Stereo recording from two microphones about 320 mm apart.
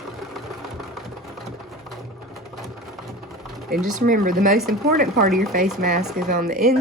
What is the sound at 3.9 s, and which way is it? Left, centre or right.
Speech, right.